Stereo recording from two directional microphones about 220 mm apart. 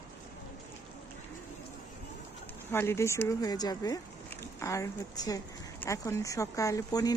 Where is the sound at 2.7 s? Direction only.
10° left (ahead or behind).